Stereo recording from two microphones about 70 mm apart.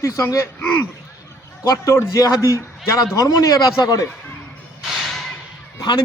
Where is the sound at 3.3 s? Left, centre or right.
Left.